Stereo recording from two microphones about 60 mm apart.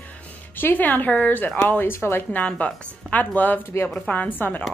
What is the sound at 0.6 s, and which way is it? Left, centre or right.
A woman's voice, left.